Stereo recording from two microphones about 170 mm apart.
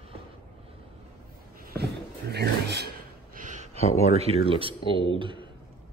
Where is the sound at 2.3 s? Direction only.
75° right (ahead or behind).